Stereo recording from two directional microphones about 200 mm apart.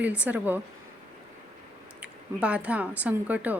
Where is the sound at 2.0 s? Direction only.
5° right (ahead or behind).